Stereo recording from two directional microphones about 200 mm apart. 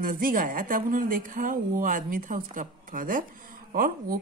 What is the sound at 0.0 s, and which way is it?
A woman's voice, 45° right (ahead or behind).